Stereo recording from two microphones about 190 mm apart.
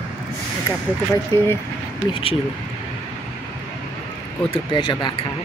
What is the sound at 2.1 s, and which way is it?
Speech, 30° left (ahead or behind).